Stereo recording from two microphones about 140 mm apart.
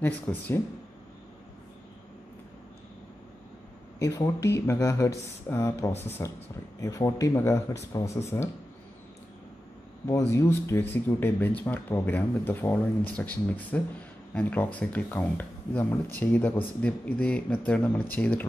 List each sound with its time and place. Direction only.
0.0 s speech: 15° left (ahead or behind)
4.0 s speech: 20° left (ahead or behind)
10.0 s speech: 20° left (ahead or behind)